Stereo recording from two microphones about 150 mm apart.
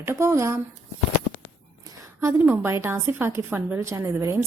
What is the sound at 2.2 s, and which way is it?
A woman's voice, 15° right (ahead or behind).